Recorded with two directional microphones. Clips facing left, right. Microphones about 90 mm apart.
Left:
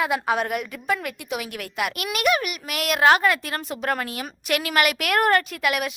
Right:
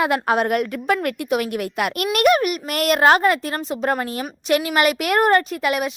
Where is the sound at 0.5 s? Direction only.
60° right (ahead or behind).